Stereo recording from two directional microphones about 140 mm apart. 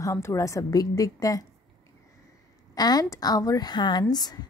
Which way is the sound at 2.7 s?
30° left (ahead or behind).